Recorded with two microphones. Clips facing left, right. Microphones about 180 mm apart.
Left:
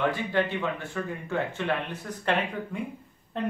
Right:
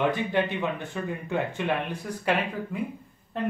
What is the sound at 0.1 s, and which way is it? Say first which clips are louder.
Speech: right 1 dB; 20° right (ahead or behind).